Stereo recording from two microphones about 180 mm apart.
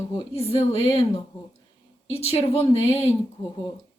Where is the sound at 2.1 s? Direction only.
35° left (ahead or behind).